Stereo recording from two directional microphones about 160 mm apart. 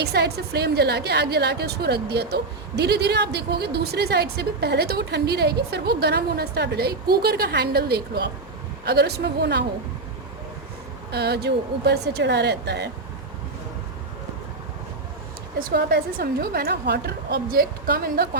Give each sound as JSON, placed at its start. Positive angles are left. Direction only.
{"t": 0.0, "sound": "a woman's voice", "side_deg": -90}
{"t": 8.8, "sound": "a woman's voice", "side_deg": -90}
{"t": 11.1, "sound": "a woman's voice", "side_deg": -90}
{"t": 15.5, "sound": "a woman's voice", "side_deg": -75}